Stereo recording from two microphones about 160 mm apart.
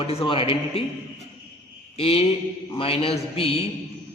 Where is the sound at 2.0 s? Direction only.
35° left (ahead or behind).